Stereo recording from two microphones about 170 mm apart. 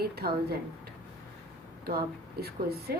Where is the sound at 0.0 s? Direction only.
65° right (ahead or behind).